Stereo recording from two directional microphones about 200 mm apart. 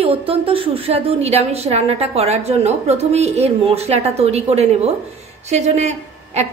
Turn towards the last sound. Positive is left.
turn(degrees=-35)  # may be behind; listen again after turning